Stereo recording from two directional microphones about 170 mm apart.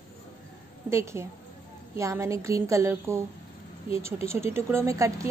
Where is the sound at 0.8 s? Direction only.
15° right (ahead or behind).